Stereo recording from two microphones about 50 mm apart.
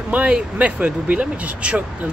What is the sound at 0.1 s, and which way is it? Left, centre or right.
Speech, right.